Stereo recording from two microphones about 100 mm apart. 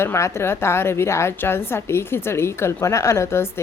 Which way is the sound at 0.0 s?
25° left (ahead or behind).